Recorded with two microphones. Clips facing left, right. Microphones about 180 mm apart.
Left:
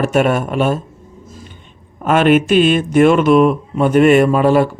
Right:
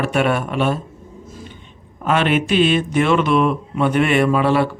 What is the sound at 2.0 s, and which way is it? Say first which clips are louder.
Speech: left 6 dB; 50° left (ahead or behind).